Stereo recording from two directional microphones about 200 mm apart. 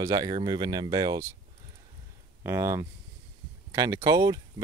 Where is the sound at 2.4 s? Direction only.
15° right (ahead or behind).